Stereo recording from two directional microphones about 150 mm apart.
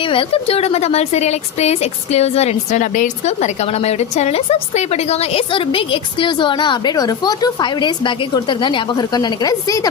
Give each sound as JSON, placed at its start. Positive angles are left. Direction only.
{"t": 0.0, "sound": "a woman's voice", "side_deg": 35}